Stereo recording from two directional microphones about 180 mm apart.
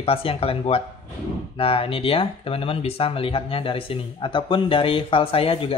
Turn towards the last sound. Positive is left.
turn(degrees=30)  # may be behind; listen again after turning